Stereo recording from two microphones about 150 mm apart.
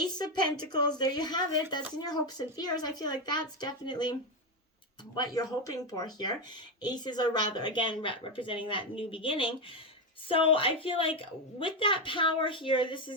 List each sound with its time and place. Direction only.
0.0 s speech: 30° left (ahead or behind)
5.1 s a woman's voice: 25° left (ahead or behind)